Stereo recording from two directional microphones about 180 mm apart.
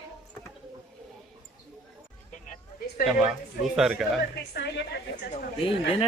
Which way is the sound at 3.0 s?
55° left (ahead or behind).